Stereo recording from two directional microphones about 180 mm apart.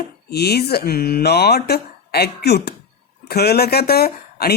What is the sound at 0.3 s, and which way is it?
A man's voice, 60° left (ahead or behind).